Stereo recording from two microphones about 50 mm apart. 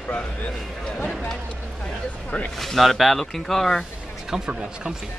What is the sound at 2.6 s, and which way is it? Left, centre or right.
Speech, centre.